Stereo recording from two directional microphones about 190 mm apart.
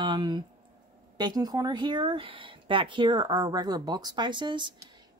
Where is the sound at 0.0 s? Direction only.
25° right (ahead or behind).